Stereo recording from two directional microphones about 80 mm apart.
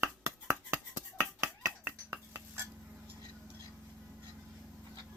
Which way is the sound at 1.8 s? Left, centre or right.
Right.